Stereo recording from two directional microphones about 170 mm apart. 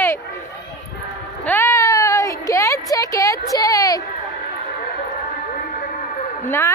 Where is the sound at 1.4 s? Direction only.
10° left (ahead or behind).